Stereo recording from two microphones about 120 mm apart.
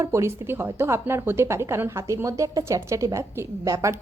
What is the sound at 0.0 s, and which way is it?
A woman's voice, 25° right (ahead or behind).